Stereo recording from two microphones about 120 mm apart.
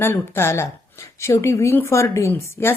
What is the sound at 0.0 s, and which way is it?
A woman's voice, 20° left (ahead or behind).